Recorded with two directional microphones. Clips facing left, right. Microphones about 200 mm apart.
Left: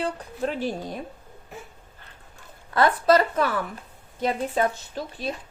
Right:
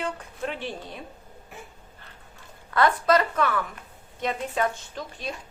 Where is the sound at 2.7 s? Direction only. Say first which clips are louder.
Left 2 dB; 30° left (ahead or behind).